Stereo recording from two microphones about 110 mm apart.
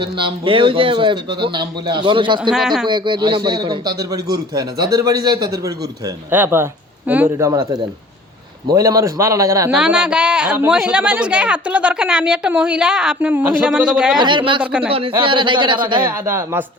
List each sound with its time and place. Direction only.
0.0 s a man's voice: 50° right (ahead or behind)
2.5 s a man's voice: 5° right (ahead or behind)
2.8 s a man's voice: 45° right (ahead or behind)
6.3 s a man's voice: 20° right (ahead or behind)
7.3 s a man's voice: 30° right (ahead or behind)
9.7 s a woman's voice: 5° right (ahead or behind)
14.2 s a man's voice: 45° right (ahead or behind)
14.6 s a woman's voice: 10° right (ahead or behind)
15.2 s a man's voice: 50° right (ahead or behind)
16.0 s a man's voice: 25° right (ahead or behind)